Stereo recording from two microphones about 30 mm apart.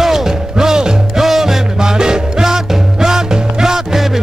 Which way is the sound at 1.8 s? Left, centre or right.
Right.